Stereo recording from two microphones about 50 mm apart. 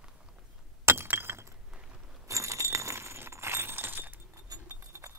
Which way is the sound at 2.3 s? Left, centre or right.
Right.